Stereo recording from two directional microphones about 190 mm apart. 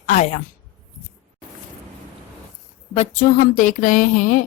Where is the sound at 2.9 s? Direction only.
40° left (ahead or behind).